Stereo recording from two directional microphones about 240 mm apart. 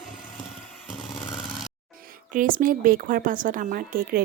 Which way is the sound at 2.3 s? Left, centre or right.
Right.